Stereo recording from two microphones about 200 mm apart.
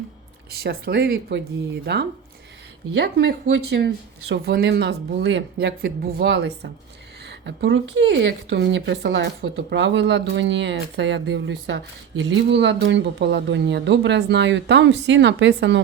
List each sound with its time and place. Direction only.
0.6 s a woman's voice: 50° right (ahead or behind)